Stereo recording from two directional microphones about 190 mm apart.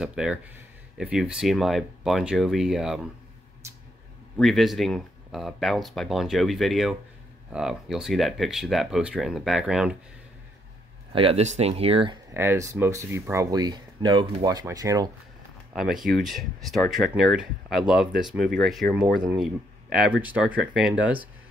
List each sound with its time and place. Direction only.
0.0 s speech: 5° right (ahead or behind)
4.4 s speech: centre (ahead or behind)
11.1 s speech: 30° right (ahead or behind)
12.4 s speech: 15° right (ahead or behind)
15.7 s speech: centre (ahead or behind)